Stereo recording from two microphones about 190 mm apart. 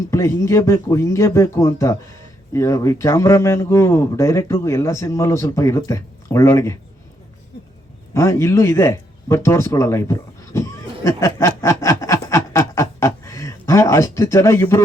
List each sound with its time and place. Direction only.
0.1 s a man's voice: 15° left (ahead or behind)
8.1 s speech: 15° left (ahead or behind)